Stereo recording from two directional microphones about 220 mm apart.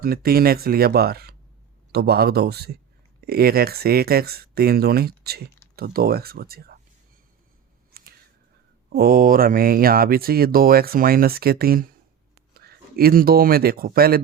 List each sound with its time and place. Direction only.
0.0 s speech: 45° right (ahead or behind)
7.9 s a sound: 45° right (ahead or behind)
8.9 s speech: 45° right (ahead or behind)